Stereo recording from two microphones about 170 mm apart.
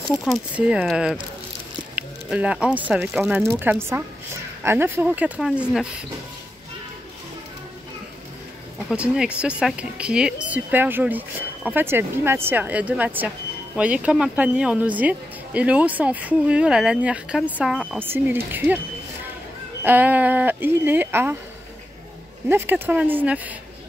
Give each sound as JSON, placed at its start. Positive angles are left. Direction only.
{"t": 0.1, "sound": "speech", "side_deg": -5}
{"t": 2.0, "sound": "a sound", "side_deg": -5}
{"t": 2.9, "sound": "speech", "side_deg": 0}
{"t": 8.9, "sound": "speech", "side_deg": -5}
{"t": 19.8, "sound": "speech", "side_deg": -10}
{"t": 22.5, "sound": "speech", "side_deg": -10}